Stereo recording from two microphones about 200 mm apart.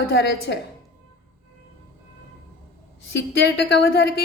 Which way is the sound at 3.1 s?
55° left (ahead or behind).